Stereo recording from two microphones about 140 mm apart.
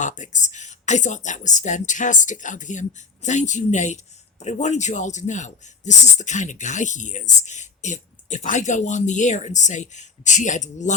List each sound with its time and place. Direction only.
0.0 s a man's voice: 60° left (ahead or behind)